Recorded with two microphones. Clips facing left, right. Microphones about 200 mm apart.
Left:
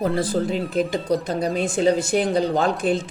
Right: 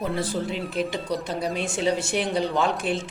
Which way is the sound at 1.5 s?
40° left (ahead or behind).